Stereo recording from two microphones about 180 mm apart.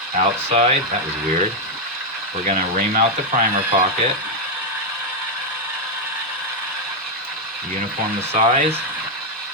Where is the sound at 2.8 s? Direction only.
45° right (ahead or behind).